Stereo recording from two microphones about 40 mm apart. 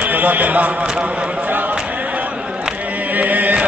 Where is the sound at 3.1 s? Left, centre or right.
Right.